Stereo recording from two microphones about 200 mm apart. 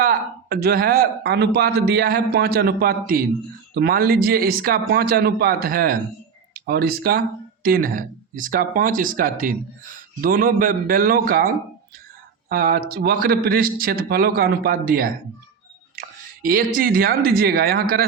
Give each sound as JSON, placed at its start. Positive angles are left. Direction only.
{"t": 0.0, "sound": "speech", "side_deg": -50}